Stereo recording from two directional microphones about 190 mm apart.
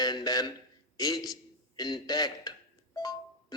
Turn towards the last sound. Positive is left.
turn(degrees=20)  # may be behind; listen again after turning